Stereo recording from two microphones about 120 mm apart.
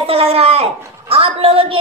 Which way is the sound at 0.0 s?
50° right (ahead or behind).